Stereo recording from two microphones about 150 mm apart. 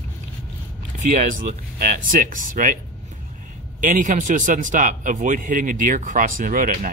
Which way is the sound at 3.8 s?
60° right (ahead or behind).